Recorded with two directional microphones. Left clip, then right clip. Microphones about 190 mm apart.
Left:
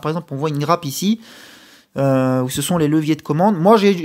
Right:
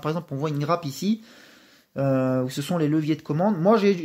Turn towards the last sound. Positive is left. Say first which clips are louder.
# left 7 dB
turn(degrees=35)  # may be behind; listen again after turning